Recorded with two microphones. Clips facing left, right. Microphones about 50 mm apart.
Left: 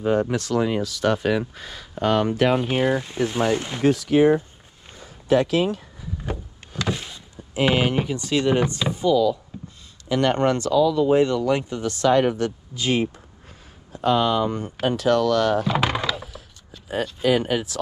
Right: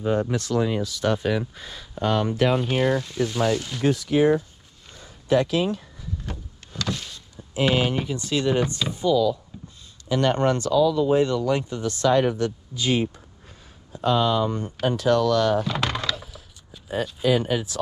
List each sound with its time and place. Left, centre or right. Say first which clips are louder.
0.0 s speech: left 2 dB; left
2.7 s speech: left 1 dB; left
6.2 s a sound: left 8 dB; centre
6.8 s vehicle: left 3 dB; centre
8.0 s speech: left 2 dB; left
8.6 s speech: left 3 dB; left
9.0 s speech: left 1 dB; left
14.0 s speech: left 1 dB; left
15.6 s a sound: left 4 dB; centre
16.9 s speech: left 1 dB; left